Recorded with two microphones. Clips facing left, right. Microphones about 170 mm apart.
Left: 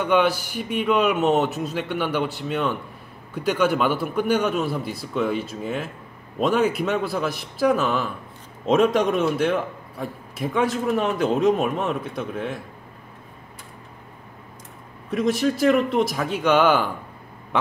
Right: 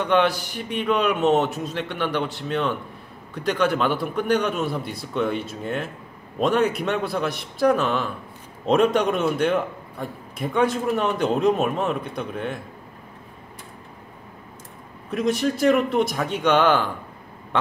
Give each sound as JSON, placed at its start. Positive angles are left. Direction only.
{"t": 0.0, "sound": "a man's voice", "side_deg": 5}
{"t": 15.0, "sound": "a man's voice", "side_deg": 0}